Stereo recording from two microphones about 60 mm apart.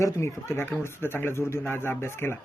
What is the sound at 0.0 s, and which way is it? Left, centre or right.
Speech, left.